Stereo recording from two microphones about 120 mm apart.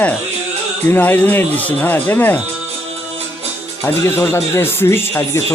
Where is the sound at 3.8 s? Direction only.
20° left (ahead or behind).